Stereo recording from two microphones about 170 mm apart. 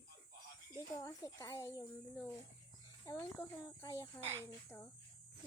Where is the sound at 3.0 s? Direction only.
15° left (ahead or behind).